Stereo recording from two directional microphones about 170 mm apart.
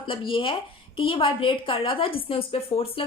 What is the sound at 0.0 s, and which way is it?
A woman's voice, 30° left (ahead or behind).